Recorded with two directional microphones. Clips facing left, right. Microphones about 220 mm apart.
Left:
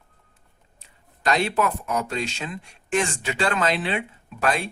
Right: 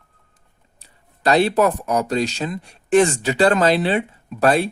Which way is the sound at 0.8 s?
35° right (ahead or behind).